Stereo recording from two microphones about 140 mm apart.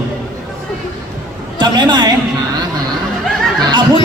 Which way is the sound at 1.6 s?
35° right (ahead or behind).